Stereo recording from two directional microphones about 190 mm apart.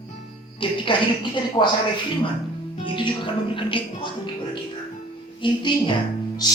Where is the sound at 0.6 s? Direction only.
25° left (ahead or behind).